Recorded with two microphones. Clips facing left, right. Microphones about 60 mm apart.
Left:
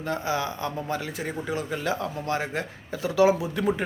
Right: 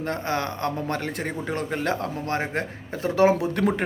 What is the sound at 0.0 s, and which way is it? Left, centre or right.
Speech, right.